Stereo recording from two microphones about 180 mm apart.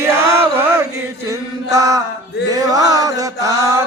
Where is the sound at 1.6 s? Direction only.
20° right (ahead or behind).